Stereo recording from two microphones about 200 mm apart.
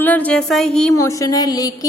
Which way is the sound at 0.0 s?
10° left (ahead or behind).